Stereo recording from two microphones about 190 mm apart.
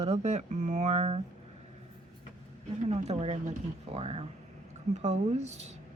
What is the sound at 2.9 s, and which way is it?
Speech, 35° right (ahead or behind).